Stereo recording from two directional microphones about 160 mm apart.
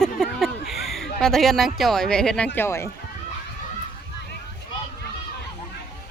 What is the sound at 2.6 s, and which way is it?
Speech, 15° left (ahead or behind).